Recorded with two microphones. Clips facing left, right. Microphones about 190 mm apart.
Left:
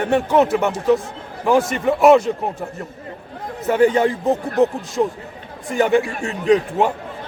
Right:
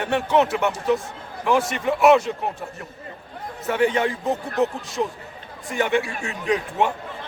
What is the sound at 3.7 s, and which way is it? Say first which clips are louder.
Speech: left 6 dB; 40° left (ahead or behind).